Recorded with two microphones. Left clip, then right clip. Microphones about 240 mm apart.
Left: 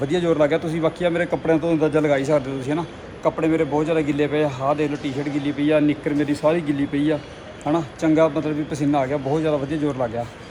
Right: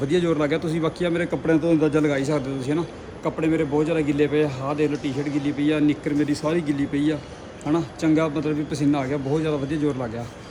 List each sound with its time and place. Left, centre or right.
0.0 s a man's voice: centre